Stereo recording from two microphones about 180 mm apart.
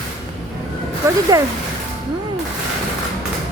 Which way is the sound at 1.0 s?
15° right (ahead or behind).